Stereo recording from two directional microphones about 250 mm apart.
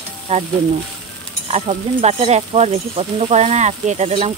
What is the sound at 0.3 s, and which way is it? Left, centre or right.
Speech, right.